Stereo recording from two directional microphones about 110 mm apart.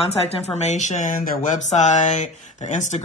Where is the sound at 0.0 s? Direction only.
65° left (ahead or behind).